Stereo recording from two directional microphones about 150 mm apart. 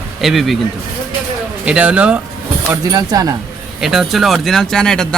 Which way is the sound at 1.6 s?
10° right (ahead or behind).